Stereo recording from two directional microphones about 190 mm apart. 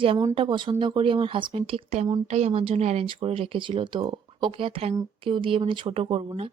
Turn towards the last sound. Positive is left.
turn(degrees=-30)  # may be behind; listen again after turning